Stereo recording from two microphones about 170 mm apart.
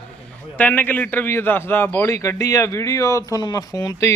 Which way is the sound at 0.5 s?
10° left (ahead or behind).